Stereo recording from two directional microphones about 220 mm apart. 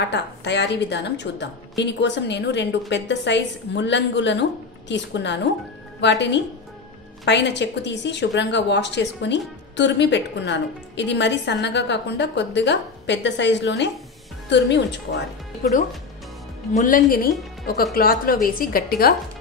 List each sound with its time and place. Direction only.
0.0 s a woman's voice: 50° left (ahead or behind)
16.7 s a woman's voice: 35° left (ahead or behind)